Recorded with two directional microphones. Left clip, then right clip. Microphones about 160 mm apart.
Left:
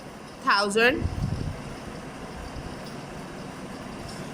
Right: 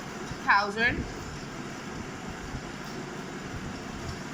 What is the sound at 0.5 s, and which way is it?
Speech, 70° left (ahead or behind).